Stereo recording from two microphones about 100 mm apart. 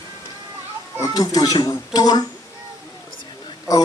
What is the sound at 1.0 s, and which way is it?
A man's voice, 40° left (ahead or behind).